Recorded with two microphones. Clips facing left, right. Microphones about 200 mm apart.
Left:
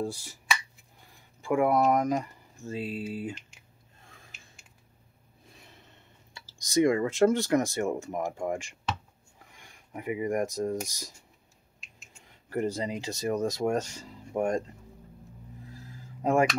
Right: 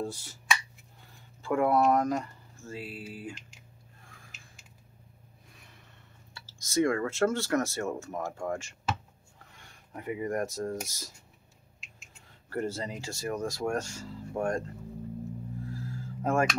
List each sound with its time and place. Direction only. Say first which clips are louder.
0.0 s speech: left 2 dB; 10° left (ahead or behind)
1.4 s speech: left 1 dB; 10° left (ahead or behind)
5.6 s a sound: left 3 dB; 25° left (ahead or behind)
6.3 s speech: left 3 dB; 15° left (ahead or behind)
12.4 s speech: left 3 dB; 15° left (ahead or behind)
15.7 s a sound: right 8 dB; 20° left (ahead or behind)